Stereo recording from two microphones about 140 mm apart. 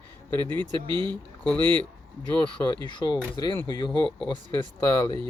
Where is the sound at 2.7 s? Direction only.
30° left (ahead or behind).